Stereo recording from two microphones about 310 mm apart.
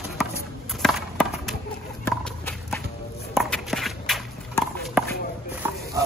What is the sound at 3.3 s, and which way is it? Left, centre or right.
Walk, centre.